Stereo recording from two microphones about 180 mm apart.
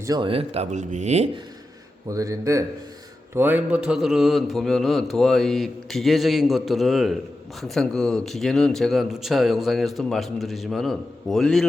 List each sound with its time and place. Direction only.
0.0 s speech: 25° right (ahead or behind); by 1.3 s 40° right (ahead or behind)
2.0 s a man's voice: 20° right (ahead or behind); by 11.7 s centre (ahead or behind)